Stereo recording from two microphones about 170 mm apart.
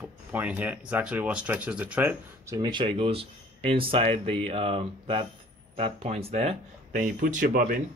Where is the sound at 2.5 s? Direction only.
25° right (ahead or behind).